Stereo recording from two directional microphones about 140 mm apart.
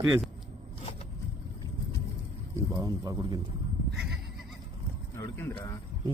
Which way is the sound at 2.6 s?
25° right (ahead or behind).